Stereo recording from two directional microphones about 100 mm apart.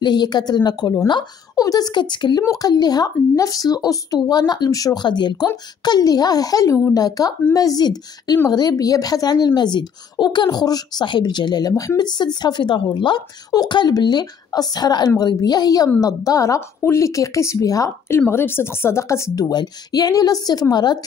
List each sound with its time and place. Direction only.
0.0 s a woman's voice: 45° left (ahead or behind); by 19.5 s 30° left (ahead or behind)
19.5 s a woman's voice: 40° left (ahead or behind)